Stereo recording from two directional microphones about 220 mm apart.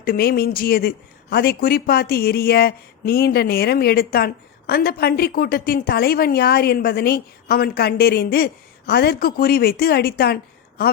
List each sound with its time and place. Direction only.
0.0 s speech: 40° left (ahead or behind)